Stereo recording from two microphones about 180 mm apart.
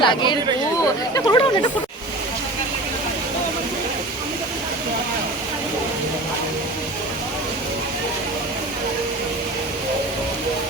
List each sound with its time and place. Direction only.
0.0 s speech: 25° left (ahead or behind)
1.1 s chatter: 20° left (ahead or behind)